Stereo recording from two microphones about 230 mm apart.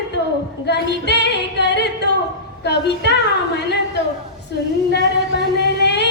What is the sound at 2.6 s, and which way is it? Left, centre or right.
Speech, left.